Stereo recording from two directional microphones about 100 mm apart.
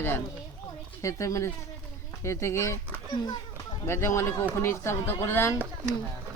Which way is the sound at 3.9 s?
25° left (ahead or behind).